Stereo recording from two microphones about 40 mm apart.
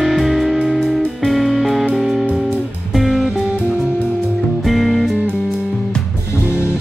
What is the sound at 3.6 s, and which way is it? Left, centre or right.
Music, centre.